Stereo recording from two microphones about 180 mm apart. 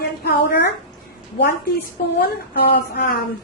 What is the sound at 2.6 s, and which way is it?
Speech, 55° left (ahead or behind).